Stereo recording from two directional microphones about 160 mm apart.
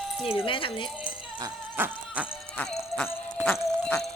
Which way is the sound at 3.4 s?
5° left (ahead or behind).